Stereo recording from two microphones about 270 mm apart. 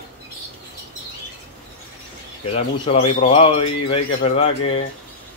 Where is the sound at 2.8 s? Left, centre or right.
Left.